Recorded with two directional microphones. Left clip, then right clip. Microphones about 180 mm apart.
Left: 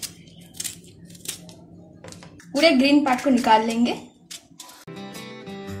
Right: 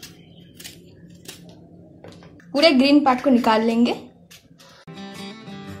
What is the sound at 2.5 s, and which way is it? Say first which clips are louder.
A woman's voice: right 2 dB; 40° right (ahead or behind).